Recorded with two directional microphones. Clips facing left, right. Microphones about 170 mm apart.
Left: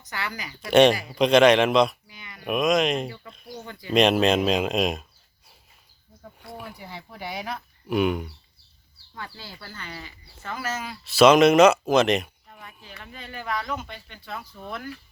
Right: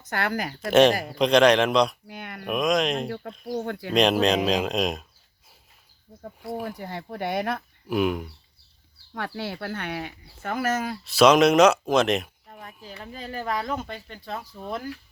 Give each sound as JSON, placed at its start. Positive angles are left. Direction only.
{"t": 0.1, "sound": "speech", "side_deg": -55}
{"t": 0.7, "sound": "speech", "side_deg": 0}
{"t": 2.0, "sound": "a sound", "side_deg": -60}
{"t": 2.4, "sound": "speech", "side_deg": 0}
{"t": 3.5, "sound": "speech", "side_deg": -60}
{"t": 3.9, "sound": "speech", "side_deg": 0}
{"t": 6.5, "sound": "speech", "side_deg": -50}
{"t": 7.9, "sound": "speech", "side_deg": 0}
{"t": 9.1, "sound": "speech", "side_deg": -75}
{"t": 10.4, "sound": "speech", "side_deg": -50}
{"t": 11.0, "sound": "speech", "side_deg": 0}
{"t": 12.5, "sound": "speech", "side_deg": -40}